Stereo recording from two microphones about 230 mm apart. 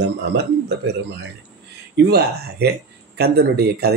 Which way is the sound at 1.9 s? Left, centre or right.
Right.